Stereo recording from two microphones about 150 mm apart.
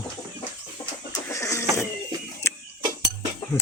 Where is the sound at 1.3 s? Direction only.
20° left (ahead or behind).